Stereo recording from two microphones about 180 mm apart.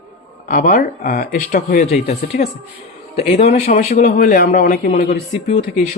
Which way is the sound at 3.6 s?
55° left (ahead or behind).